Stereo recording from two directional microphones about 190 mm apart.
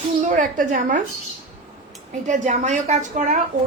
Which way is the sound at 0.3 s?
40° right (ahead or behind).